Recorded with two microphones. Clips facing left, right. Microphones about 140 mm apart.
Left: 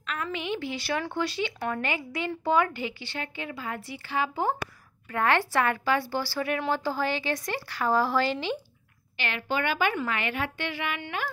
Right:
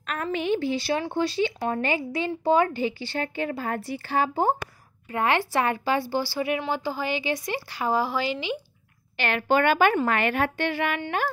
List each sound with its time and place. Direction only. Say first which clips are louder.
0.0 s a woman's voice: right 5 dB; 45° right (ahead or behind)
5.1 s speech: right 1 dB; 20° right (ahead or behind)
9.1 s a woman's voice: right 7 dB; 50° right (ahead or behind)